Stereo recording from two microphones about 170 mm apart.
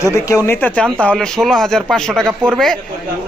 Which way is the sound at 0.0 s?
15° left (ahead or behind).